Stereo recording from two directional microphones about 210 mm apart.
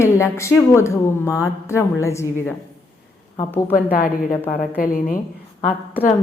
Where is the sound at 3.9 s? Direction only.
40° left (ahead or behind).